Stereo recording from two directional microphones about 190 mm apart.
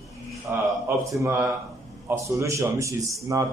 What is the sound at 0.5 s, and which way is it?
A man's voice, 10° right (ahead or behind).